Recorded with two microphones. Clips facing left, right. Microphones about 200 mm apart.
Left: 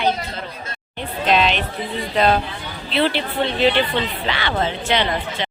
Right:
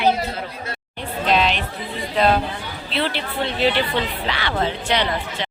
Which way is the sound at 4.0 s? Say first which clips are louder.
Left 1 dB; 25° left (ahead or behind).